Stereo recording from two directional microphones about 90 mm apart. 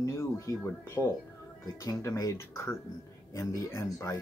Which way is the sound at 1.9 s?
40° left (ahead or behind).